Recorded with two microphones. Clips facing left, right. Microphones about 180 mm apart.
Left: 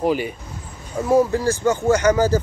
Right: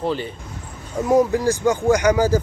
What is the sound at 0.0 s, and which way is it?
Speech, 10° left (ahead or behind).